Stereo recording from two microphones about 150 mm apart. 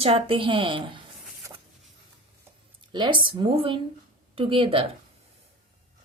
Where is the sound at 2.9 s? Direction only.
30° right (ahead or behind).